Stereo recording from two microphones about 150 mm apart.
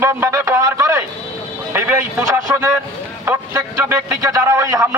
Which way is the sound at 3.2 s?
15° right (ahead or behind).